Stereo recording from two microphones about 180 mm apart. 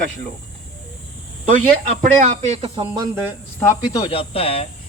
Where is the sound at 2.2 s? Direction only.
40° right (ahead or behind).